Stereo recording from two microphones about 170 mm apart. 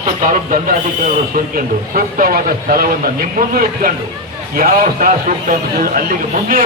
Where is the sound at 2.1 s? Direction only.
55° right (ahead or behind).